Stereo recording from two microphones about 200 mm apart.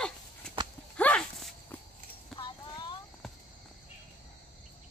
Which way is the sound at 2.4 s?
25° left (ahead or behind).